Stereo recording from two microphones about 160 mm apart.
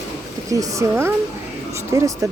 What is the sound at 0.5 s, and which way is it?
Speech, 20° right (ahead or behind).